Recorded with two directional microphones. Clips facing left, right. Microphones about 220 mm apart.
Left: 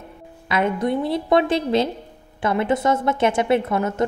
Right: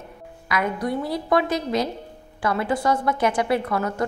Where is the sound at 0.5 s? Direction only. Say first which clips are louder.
Left 4 dB; 25° left (ahead or behind).